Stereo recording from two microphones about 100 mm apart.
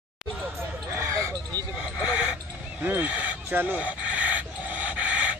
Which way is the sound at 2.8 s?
15° right (ahead or behind).